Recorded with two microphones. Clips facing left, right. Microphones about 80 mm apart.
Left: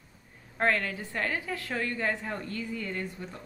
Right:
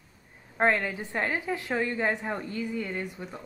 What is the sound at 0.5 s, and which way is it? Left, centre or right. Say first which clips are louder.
A woman's voice: right 3 dB; right.